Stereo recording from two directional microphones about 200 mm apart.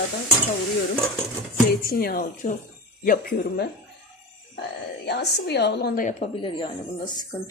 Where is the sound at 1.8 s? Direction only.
50° left (ahead or behind).